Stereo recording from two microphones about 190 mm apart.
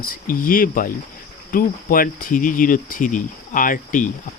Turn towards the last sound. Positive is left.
turn(degrees=45)  # may be behind; listen again after turning